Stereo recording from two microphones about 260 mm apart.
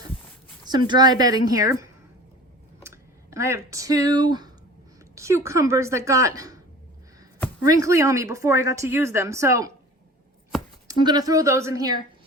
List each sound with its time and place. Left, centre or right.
0.7 s speech: centre
7.6 s speech: centre
10.8 s speech: centre